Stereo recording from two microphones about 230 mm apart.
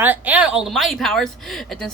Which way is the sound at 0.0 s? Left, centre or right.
Centre.